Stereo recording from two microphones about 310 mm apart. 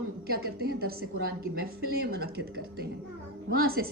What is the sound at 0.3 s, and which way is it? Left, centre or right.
A woman's voice, right.